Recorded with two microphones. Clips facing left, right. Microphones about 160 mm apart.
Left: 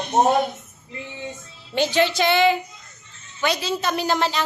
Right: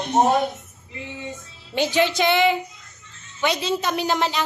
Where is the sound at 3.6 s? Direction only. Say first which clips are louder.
Even; 20° right (ahead or behind).